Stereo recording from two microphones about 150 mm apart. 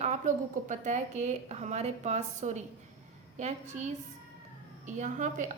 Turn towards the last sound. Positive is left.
turn(degrees=-55)  # may be behind; listen again after turning